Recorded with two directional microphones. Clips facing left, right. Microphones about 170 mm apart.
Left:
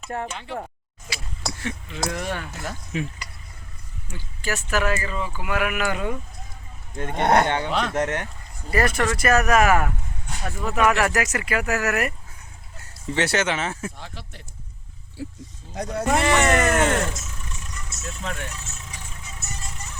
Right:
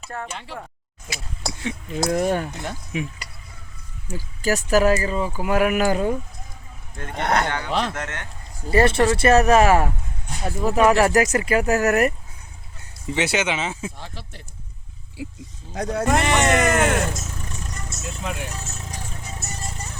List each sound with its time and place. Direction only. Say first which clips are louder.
0.1 s speech: left 3 dB; 25° left (ahead or behind)
2.1 s speech: right 8 dB; 45° right (ahead or behind)
2.9 s speech: even; 15° right (ahead or behind)
4.1 s speech: right 6 dB; 40° right (ahead or behind)
6.9 s speech: left 3 dB; 25° left (ahead or behind)
8.6 s speech: right 5 dB; 30° right (ahead or behind)
13.1 s speech: even; 10° right (ahead or behind)
14.0 s speech: right 1 dB; 30° right (ahead or behind)
15.2 s speech: even; 15° right (ahead or behind)
15.7 s speech: right 3 dB; 90° right
16.1 s speech: left 1 dB; 20° right (ahead or behind)
17.2 s vehicle: right 5 dB; 40° right (ahead or behind)
18.0 s speech: right 1 dB; 10° right (ahead or behind)
18.5 s music: right 5 dB; 35° right (ahead or behind)